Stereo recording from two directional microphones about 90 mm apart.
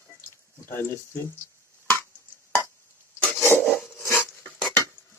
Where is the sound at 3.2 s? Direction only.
20° left (ahead or behind).